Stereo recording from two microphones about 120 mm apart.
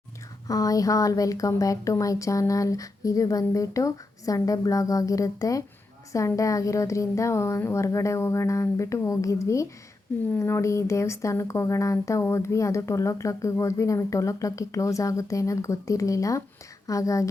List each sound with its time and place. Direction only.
0.4 s speech: 30° left (ahead or behind)